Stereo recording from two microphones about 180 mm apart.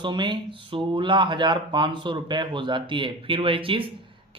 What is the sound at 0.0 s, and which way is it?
A man's voice, 25° right (ahead or behind).